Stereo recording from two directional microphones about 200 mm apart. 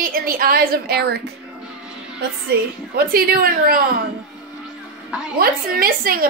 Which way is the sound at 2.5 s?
50° right (ahead or behind).